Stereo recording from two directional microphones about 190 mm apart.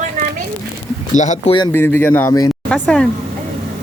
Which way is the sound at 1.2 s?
40° left (ahead or behind).